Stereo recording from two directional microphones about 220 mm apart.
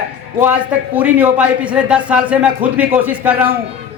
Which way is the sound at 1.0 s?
5° right (ahead or behind).